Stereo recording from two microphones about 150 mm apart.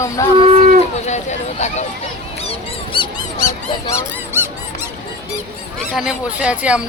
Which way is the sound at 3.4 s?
25° left (ahead or behind).